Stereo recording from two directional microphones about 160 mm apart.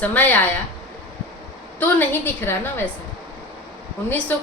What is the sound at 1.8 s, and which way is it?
A woman's voice, 15° left (ahead or behind).